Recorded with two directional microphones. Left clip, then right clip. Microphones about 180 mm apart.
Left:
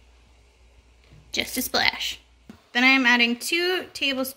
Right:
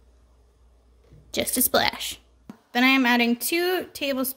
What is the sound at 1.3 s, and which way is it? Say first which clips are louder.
Speech: right 2 dB; 65° right (ahead or behind).